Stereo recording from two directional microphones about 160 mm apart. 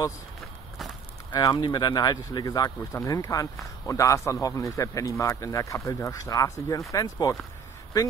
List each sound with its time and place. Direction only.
1.3 s speech: 25° left (ahead or behind)